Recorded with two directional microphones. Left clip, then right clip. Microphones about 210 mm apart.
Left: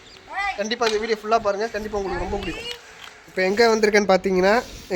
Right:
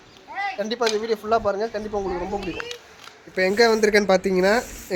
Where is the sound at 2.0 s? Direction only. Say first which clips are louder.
Even; 20° left (ahead or behind).